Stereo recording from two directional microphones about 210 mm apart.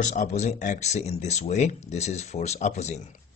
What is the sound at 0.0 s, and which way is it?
Speech, 35° left (ahead or behind).